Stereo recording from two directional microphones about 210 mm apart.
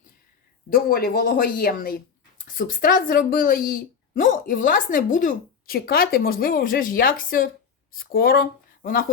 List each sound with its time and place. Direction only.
0.7 s a woman's voice: 45° left (ahead or behind)